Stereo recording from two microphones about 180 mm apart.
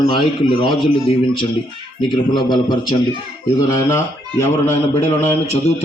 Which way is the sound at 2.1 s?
25° left (ahead or behind).